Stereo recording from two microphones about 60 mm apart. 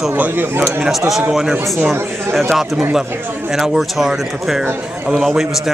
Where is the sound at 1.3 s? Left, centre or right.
Centre.